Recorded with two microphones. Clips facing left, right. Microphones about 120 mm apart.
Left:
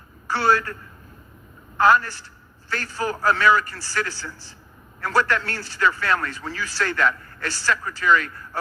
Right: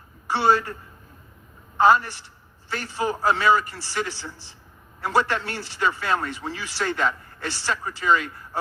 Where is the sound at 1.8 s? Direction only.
15° right (ahead or behind).